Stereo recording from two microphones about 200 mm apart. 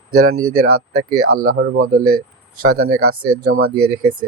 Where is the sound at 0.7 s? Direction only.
90° right.